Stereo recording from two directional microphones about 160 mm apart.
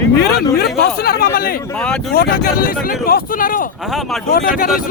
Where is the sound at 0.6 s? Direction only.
75° left (ahead or behind).